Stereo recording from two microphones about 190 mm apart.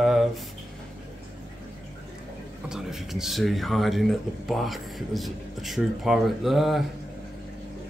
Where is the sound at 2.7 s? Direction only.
5° right (ahead or behind).